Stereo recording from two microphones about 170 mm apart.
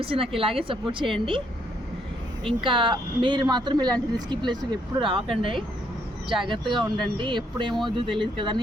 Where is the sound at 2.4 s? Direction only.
30° right (ahead or behind).